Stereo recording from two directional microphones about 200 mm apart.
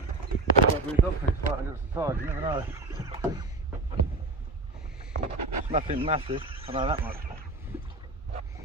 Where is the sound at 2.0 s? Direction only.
10° right (ahead or behind).